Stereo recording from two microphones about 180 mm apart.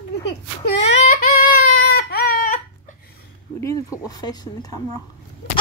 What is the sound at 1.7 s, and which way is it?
Baby cry, 60° left (ahead or behind).